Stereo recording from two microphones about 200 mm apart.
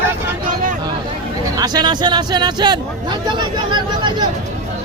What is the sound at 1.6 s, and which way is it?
Speech, 20° right (ahead or behind).